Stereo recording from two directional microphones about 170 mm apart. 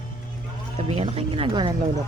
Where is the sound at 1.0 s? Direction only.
35° right (ahead or behind).